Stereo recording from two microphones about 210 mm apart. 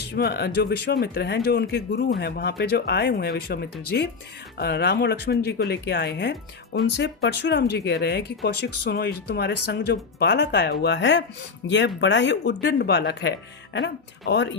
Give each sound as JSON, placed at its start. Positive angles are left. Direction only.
{"t": 0.1, "sound": "speech", "side_deg": 50}